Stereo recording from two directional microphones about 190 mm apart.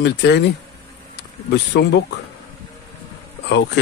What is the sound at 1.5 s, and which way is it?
Speech, 65° left (ahead or behind).